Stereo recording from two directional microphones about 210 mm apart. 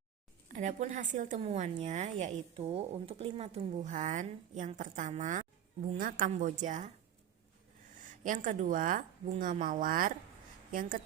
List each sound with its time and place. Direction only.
0.4 s a woman's voice: 35° right (ahead or behind)
8.0 s a woman's voice: 40° right (ahead or behind)